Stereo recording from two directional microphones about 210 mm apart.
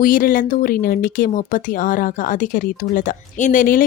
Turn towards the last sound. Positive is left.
turn(degrees=40)  # may be behind; listen again after turning